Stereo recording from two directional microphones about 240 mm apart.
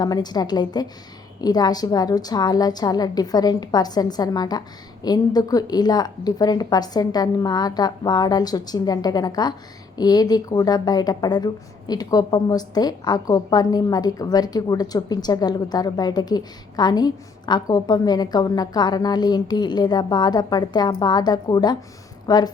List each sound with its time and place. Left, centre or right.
0.0 s a woman's voice: centre